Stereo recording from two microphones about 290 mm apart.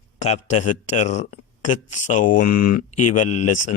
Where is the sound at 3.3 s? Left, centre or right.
Left.